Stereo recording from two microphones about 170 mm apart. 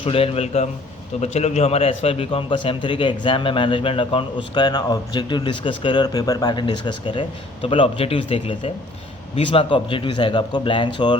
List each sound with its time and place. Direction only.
0.0 s a man's voice: 35° left (ahead or behind)